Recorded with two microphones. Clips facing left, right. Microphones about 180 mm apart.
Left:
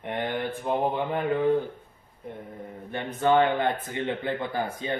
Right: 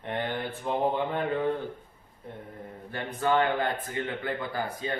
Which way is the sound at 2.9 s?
20° left (ahead or behind).